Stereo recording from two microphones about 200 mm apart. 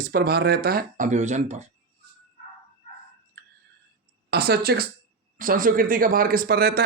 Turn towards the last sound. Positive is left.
turn(degrees=-50)  # may be behind; listen again after turning